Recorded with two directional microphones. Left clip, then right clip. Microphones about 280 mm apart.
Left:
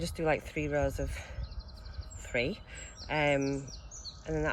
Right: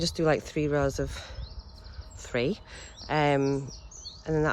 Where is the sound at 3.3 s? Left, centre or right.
Right.